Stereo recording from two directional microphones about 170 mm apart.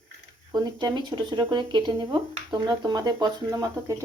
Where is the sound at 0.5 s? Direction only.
25° right (ahead or behind).